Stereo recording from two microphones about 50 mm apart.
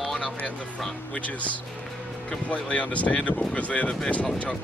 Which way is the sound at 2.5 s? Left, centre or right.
Left.